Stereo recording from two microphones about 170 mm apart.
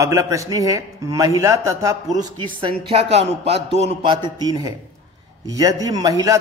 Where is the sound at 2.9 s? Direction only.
35° right (ahead or behind); by 6.4 s 20° right (ahead or behind).